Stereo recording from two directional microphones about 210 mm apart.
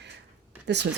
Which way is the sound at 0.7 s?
55° right (ahead or behind).